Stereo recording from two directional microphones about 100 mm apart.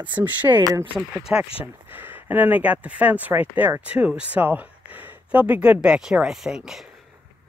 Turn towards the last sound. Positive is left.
turn(degrees=-5)  # may be behind; listen again after turning